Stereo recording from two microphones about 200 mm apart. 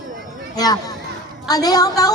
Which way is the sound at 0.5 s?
20° left (ahead or behind).